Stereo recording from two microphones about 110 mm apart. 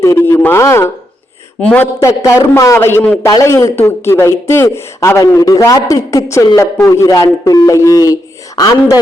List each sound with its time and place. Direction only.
0.0 s a man's voice: 25° left (ahead or behind)
1.6 s speech: 15° left (ahead or behind)
2.0 s a man's voice: 25° left (ahead or behind)
3.2 s a man's voice: 30° left (ahead or behind)